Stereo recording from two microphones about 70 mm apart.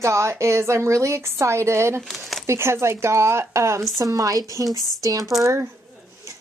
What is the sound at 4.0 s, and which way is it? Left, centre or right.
A woman's voice, right.